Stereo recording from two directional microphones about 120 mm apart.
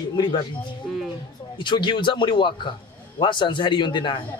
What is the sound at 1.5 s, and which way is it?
A man's voice, 40° left (ahead or behind).